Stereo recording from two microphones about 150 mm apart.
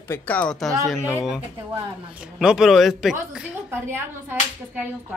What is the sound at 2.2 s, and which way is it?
Speech, 5° right (ahead or behind).